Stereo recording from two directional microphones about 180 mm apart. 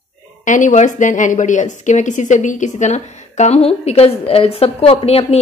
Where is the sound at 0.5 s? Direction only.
45° left (ahead or behind).